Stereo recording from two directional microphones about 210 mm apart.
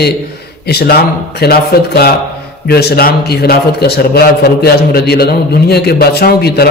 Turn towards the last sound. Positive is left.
turn(degrees=50)  # may be behind; listen again after turning